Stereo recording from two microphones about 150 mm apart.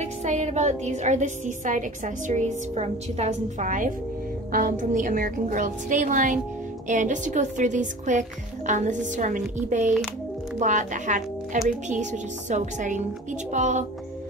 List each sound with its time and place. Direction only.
0.0 s a woman's voice: 50° right (ahead or behind)